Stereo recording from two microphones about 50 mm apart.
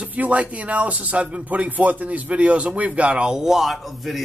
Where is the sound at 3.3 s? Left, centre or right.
Centre.